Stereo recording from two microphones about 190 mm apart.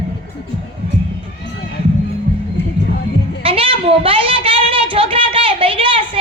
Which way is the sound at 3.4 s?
30° right (ahead or behind).